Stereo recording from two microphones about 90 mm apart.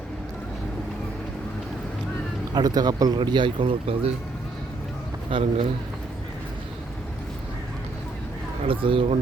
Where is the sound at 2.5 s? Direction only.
45° right (ahead or behind); by 4.1 s 90° right.